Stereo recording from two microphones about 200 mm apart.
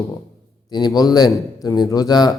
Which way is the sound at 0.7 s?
20° left (ahead or behind).